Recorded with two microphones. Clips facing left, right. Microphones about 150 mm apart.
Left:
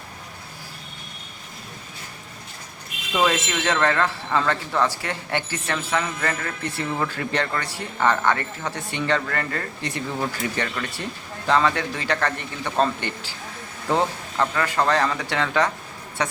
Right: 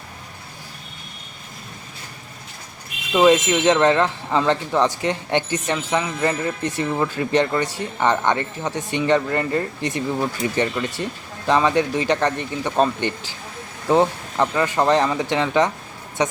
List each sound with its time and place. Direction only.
3.1 s speech: 15° right (ahead or behind)